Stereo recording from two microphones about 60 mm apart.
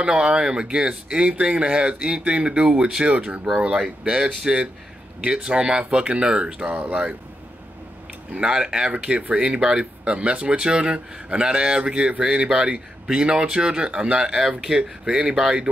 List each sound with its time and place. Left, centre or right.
0.0 s speech: centre
8.4 s speech: centre